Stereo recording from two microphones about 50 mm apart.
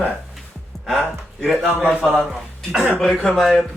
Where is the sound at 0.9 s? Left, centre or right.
Centre.